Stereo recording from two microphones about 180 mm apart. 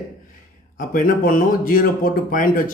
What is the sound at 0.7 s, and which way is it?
A man's voice, 50° left (ahead or behind).